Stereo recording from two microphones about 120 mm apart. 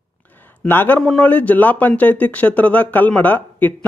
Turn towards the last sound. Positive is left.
turn(degrees=15)  # may be behind; listen again after turning